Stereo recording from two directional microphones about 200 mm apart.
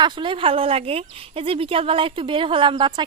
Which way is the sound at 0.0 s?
25° right (ahead or behind).